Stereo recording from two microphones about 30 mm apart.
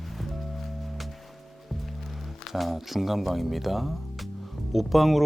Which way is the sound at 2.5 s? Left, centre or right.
Centre.